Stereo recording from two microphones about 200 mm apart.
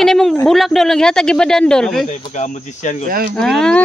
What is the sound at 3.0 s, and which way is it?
Speech, 45° right (ahead or behind).